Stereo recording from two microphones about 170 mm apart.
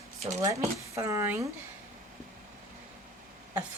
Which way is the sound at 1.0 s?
15° right (ahead or behind).